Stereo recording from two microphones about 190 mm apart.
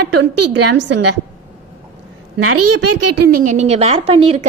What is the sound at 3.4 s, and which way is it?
A woman's voice, 40° right (ahead or behind).